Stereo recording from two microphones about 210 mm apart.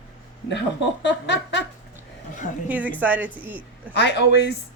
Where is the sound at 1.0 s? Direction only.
55° left (ahead or behind).